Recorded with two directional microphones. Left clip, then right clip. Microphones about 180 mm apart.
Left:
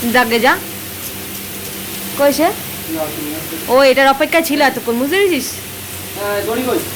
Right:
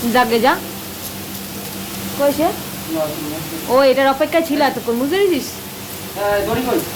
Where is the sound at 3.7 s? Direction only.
10° left (ahead or behind).